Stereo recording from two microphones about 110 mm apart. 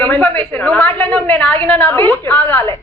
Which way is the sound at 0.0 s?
15° left (ahead or behind).